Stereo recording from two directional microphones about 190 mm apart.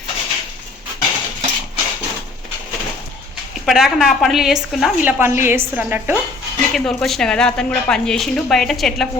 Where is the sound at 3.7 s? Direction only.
Centre (ahead or behind).